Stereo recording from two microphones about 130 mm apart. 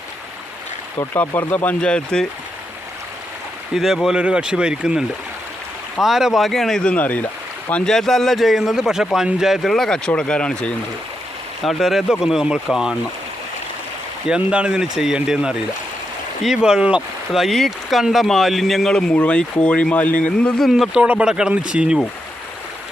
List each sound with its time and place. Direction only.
0.9 s speech: 15° left (ahead or behind)
3.8 s speech: centre (ahead or behind)
14.3 s speech: 5° right (ahead or behind)
20.7 s speech: 5° right (ahead or behind)